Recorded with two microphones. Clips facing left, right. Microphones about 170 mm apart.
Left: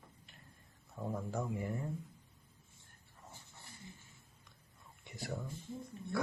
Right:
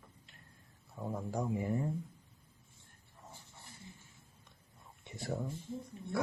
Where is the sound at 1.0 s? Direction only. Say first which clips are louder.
Even; 5° right (ahead or behind).